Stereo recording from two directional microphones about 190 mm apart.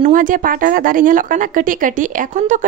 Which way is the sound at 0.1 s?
45° right (ahead or behind).